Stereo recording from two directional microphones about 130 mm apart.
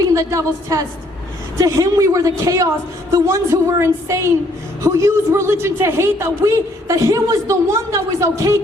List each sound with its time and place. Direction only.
0.1 s a man's voice: 25° right (ahead or behind)